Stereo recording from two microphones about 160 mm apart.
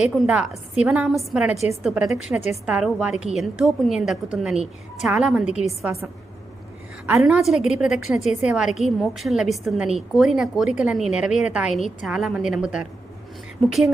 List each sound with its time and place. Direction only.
0.0 s a woman's voice: centre (ahead or behind)
1.5 s a woman's voice: 40° left (ahead or behind)
1.8 s a woman's voice: 5° right (ahead or behind)
7.2 s a woman's voice: 5° right (ahead or behind)